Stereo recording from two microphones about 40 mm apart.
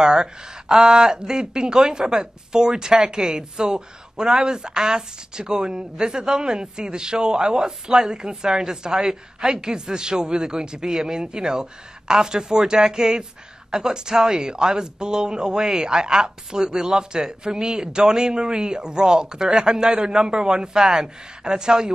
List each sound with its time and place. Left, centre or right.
0.0 s speech: centre